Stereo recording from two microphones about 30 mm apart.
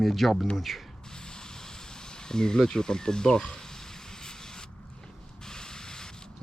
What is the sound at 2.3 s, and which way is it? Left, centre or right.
Speech, left.